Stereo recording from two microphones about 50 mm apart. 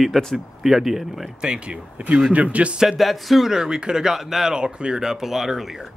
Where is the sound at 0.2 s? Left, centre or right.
Centre.